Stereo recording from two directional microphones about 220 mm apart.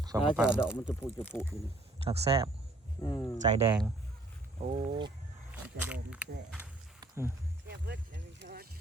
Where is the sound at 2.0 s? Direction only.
25° right (ahead or behind).